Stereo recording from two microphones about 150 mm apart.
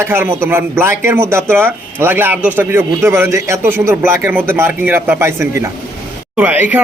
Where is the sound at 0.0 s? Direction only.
15° right (ahead or behind).